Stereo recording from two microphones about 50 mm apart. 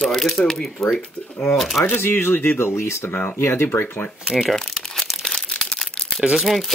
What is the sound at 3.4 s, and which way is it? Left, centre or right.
Speech, left.